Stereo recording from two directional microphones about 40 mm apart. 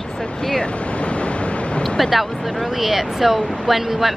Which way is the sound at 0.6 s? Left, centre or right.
Left.